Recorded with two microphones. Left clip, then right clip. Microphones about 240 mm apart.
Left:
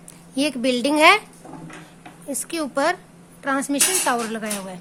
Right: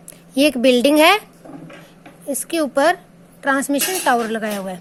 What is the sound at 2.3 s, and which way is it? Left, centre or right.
A woman's voice, centre.